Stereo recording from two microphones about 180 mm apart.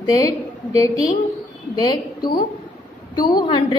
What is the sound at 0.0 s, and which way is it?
A woman's voice, 20° left (ahead or behind).